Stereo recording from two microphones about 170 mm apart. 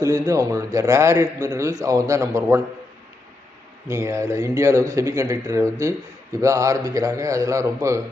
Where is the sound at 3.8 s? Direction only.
15° right (ahead or behind).